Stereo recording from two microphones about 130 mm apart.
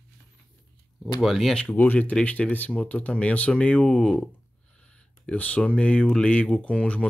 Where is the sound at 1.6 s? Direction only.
15° left (ahead or behind).